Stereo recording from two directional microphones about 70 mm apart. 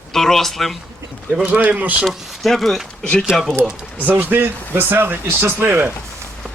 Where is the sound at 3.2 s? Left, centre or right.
Centre.